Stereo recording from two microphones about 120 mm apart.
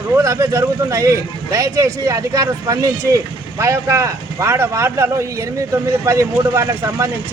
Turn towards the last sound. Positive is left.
turn(degrees=-25)  # may be behind; listen again after turning